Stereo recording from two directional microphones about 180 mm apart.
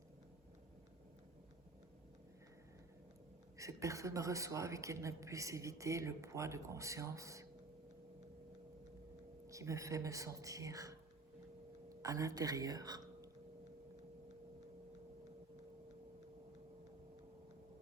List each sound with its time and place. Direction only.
3.6 s a woman's voice: 15° right (ahead or behind)
9.5 s a woman's voice: 15° right (ahead or behind)
12.0 s a woman's voice: 20° right (ahead or behind)